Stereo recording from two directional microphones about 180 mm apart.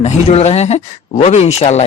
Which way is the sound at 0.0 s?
35° left (ahead or behind).